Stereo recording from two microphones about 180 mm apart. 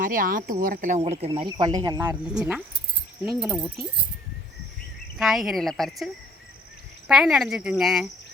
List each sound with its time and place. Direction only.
0.0 s speech: 50° right (ahead or behind)
1.2 s speech: 30° right (ahead or behind)
2.0 s speech: 5° right (ahead or behind)
5.1 s speech: centre (ahead or behind)
7.1 s speech: centre (ahead or behind)